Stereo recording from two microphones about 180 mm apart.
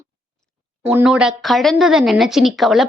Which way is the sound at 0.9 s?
5° right (ahead or behind).